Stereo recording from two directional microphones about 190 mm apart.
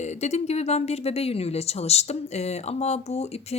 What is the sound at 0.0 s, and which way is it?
Speech, 35° left (ahead or behind).